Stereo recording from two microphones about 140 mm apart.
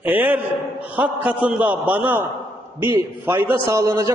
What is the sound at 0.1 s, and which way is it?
A man's voice, 10° right (ahead or behind).